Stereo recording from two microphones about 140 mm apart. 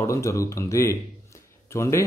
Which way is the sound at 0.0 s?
20° left (ahead or behind).